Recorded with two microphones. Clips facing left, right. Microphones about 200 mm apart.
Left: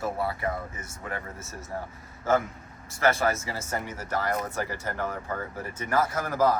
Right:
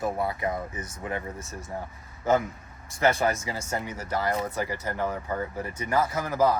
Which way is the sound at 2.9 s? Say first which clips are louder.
Right 1 dB; 20° right (ahead or behind).